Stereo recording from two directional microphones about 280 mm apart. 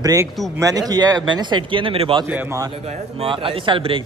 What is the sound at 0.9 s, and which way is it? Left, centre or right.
A man's voice, centre.